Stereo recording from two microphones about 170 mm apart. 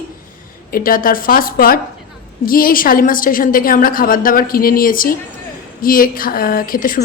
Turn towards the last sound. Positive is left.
turn(degrees=55)  # may be behind; listen again after turning